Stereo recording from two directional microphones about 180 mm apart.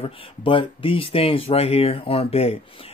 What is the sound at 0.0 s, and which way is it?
Speech, 30° left (ahead or behind).